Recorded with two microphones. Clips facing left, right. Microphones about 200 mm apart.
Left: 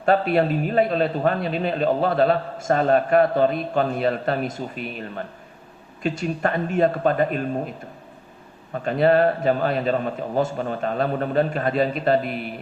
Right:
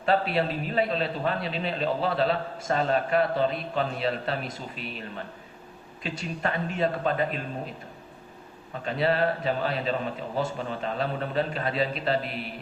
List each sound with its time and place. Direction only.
0.0 s a man's voice: 50° left (ahead or behind)
8.8 s a man's voice: 50° left (ahead or behind)